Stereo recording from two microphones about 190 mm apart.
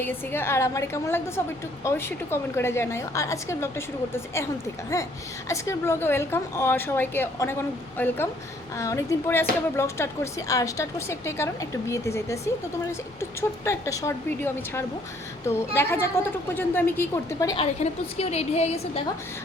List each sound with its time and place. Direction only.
0.0 s speech: 10° left (ahead or behind)
5.5 s speech: 15° left (ahead or behind)
13.7 s speech: 15° left (ahead or behind)
17.6 s a woman's voice: 35° left (ahead or behind)